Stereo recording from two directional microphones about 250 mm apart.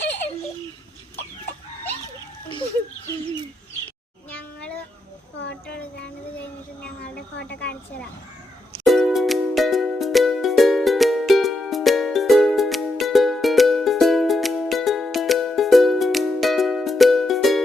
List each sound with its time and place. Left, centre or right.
4.3 s cat: centre
5.4 s child singing: left
7.3 s a sound: left
8.8 s music: centre